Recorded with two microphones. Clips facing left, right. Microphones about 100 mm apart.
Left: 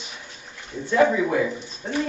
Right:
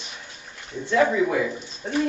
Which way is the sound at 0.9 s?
5° left (ahead or behind).